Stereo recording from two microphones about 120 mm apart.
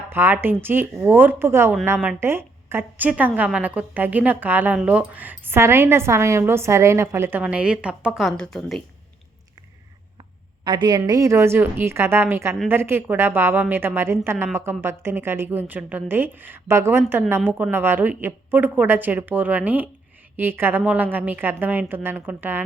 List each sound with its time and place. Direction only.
0.1 s a woman's voice: 20° right (ahead or behind)
7.4 s a woman's voice: 10° right (ahead or behind)
8.2 s speech: 5° left (ahead or behind)
10.6 s a woman's voice: 40° right (ahead or behind); by 22.6 s 15° right (ahead or behind)